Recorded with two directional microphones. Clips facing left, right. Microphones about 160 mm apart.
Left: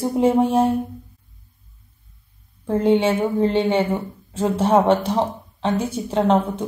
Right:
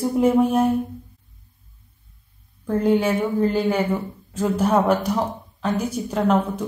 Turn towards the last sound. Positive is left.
turn(degrees=30)  # may be behind; listen again after turning